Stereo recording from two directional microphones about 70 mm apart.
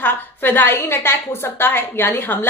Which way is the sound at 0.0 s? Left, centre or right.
Left.